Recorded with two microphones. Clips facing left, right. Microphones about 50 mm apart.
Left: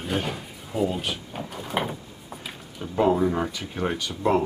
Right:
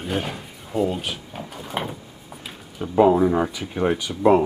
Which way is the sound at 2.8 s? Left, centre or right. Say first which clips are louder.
Right 5 dB; centre.